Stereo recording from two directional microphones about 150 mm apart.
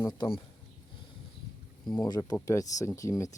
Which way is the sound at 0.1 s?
30° left (ahead or behind).